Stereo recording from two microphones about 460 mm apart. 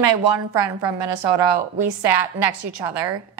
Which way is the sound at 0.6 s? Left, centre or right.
Right.